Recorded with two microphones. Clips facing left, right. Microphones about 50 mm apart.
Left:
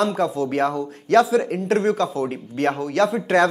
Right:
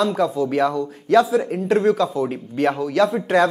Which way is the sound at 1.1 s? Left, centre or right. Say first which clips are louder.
Even; left.